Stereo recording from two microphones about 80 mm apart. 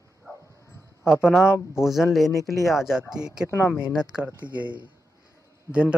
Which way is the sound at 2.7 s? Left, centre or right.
Centre.